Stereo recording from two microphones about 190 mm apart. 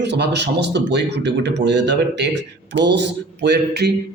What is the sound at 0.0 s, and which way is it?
A man's voice, 65° right (ahead or behind).